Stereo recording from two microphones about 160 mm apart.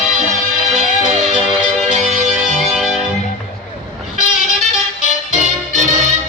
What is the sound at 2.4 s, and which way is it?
Music, 5° right (ahead or behind).